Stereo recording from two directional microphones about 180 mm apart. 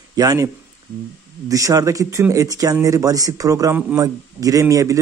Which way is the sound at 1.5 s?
20° right (ahead or behind).